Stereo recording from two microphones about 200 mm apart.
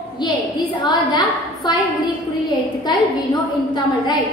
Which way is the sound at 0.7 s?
20° left (ahead or behind).